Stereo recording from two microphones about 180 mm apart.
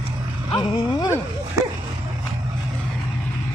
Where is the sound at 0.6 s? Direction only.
20° left (ahead or behind).